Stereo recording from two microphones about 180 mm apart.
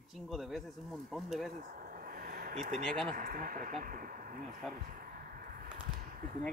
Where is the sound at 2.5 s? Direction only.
40° right (ahead or behind).